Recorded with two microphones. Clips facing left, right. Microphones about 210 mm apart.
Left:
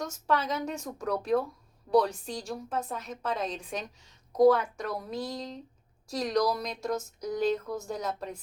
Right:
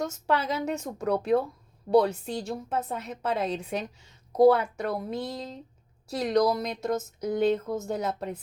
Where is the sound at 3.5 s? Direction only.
25° right (ahead or behind).